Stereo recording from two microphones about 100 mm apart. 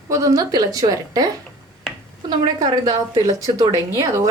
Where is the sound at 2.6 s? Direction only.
40° right (ahead or behind).